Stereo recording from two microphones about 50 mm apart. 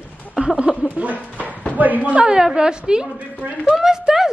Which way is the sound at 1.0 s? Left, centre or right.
Right.